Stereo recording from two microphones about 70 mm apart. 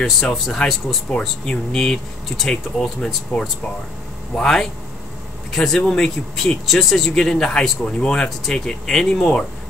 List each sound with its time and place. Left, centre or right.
0.0 s speech: centre
3.3 s speech: left
4.4 s speech: centre